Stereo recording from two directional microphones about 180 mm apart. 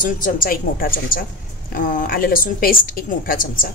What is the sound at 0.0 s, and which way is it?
A woman's voice, 50° left (ahead or behind).